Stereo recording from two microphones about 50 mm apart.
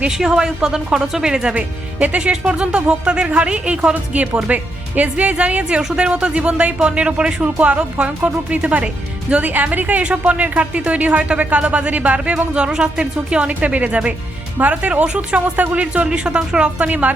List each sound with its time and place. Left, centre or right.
0.1 s speech: centre